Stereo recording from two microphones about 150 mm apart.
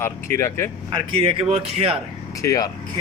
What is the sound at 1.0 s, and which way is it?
Speech, 40° right (ahead or behind).